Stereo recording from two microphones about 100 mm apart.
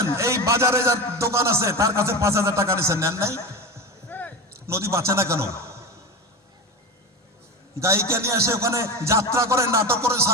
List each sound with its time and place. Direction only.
0.0 s a man's voice: 30° right (ahead or behind)
4.1 s a sound: 20° left (ahead or behind)
4.6 s a man's voice: 30° right (ahead or behind)
7.8 s a man's voice: 30° right (ahead or behind)